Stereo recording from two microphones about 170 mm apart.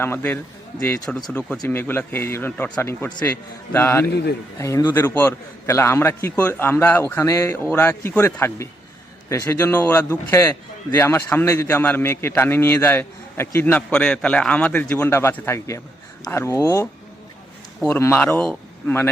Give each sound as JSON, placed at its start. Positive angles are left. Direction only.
{"t": 0.0, "sound": "a man's voice", "side_deg": 10}